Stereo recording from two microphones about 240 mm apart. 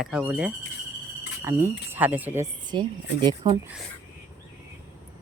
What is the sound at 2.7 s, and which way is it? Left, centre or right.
Speech, centre.